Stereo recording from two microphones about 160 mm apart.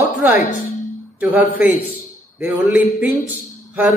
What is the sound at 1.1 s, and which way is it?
A man's voice, 10° right (ahead or behind).